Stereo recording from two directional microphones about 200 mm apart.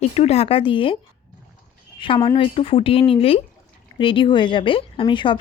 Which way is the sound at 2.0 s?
20° left (ahead or behind).